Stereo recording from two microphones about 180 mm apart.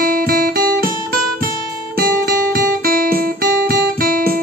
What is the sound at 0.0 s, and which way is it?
Guitar, 55° right (ahead or behind).